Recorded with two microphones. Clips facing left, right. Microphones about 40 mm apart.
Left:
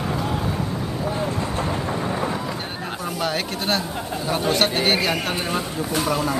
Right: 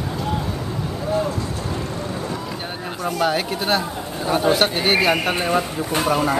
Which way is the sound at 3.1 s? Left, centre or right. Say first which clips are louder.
Right 5 dB; centre.